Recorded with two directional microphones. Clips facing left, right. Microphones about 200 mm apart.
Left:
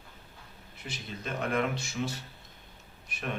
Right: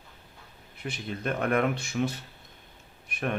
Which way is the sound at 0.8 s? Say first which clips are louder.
Right 7 dB; 55° right (ahead or behind).